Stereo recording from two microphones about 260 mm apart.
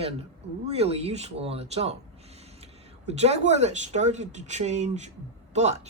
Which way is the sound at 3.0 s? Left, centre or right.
Right.